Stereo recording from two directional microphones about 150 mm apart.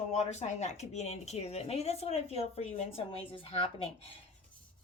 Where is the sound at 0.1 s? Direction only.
50° left (ahead or behind).